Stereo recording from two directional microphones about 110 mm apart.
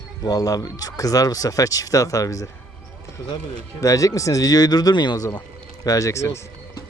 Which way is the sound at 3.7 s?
30° left (ahead or behind).